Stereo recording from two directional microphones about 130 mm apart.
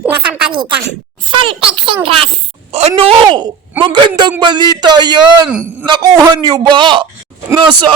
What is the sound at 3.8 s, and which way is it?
A man's voice, 35° right (ahead or behind).